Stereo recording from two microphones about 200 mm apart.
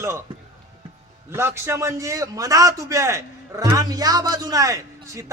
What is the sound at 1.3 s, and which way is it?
A man's voice, 10° right (ahead or behind).